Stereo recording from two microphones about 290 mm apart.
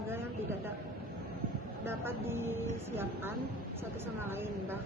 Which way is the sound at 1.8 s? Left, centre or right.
Centre.